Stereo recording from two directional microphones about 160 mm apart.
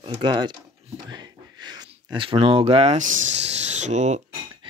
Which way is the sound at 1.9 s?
35° right (ahead or behind).